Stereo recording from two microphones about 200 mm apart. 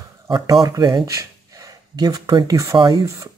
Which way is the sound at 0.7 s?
20° right (ahead or behind).